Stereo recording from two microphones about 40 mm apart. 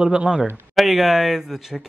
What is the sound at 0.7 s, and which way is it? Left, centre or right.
Speech, centre.